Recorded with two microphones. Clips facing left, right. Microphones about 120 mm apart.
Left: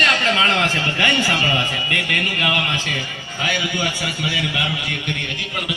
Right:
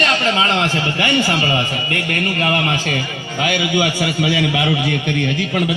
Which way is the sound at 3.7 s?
90° right.